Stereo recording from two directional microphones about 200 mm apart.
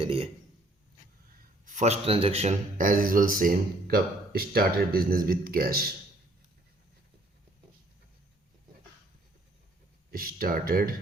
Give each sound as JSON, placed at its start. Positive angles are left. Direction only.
{"t": 0.0, "sound": "a man's voice", "side_deg": -30}
{"t": 1.6, "sound": "a man's voice", "side_deg": -35}
{"t": 10.1, "sound": "a man's voice", "side_deg": -45}